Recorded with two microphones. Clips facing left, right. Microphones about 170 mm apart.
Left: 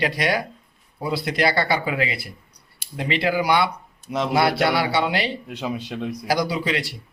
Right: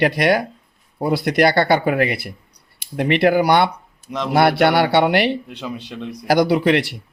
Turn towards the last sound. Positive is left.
turn(degrees=-60)  # may be behind; listen again after turning